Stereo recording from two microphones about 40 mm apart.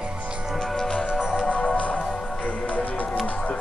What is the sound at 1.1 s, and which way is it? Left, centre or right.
Music, right.